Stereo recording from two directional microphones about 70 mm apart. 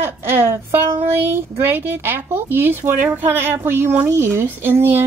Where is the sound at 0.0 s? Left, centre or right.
Right.